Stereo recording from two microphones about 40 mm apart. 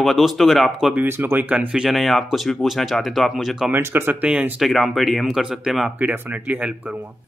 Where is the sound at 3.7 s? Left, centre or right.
Right.